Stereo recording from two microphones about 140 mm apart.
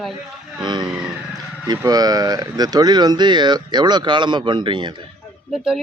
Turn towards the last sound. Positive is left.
turn(degrees=-5)  # may be behind; listen again after turning